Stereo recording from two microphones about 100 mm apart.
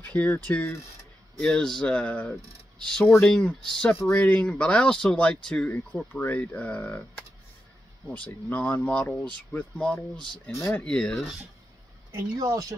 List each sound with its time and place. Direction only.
0.0 s speech: 15° left (ahead or behind)
10.8 s speech: 10° left (ahead or behind)
12.1 s speech: 35° right (ahead or behind)